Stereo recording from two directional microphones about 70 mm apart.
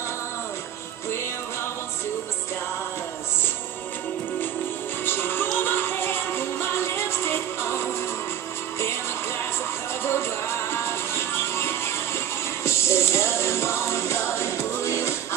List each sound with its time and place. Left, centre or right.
5.0 s music: left
10.0 s music: left